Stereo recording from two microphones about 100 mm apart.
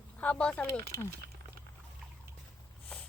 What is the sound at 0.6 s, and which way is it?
Speech, 25° left (ahead or behind).